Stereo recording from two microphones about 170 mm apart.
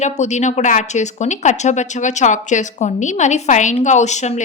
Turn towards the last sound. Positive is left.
turn(degrees=45)  # may be behind; listen again after turning